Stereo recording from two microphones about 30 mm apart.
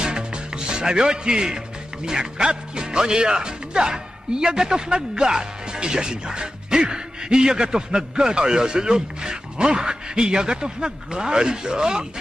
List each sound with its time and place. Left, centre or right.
0.0 s music: right
2.0 s a man's voice: right